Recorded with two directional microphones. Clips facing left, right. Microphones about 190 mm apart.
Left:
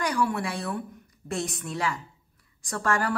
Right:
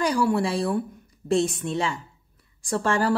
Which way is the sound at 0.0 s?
30° right (ahead or behind).